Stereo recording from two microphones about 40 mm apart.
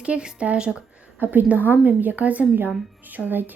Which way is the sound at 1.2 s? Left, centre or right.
Right.